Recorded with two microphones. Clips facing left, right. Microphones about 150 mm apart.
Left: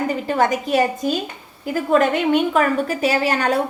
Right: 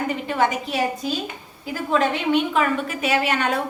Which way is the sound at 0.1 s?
40° left (ahead or behind).